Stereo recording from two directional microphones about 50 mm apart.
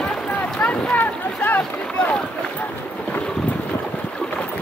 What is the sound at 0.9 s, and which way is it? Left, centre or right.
Boat, left.